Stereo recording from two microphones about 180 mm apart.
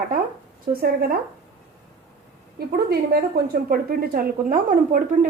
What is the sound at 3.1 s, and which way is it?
A woman's voice, 55° right (ahead or behind).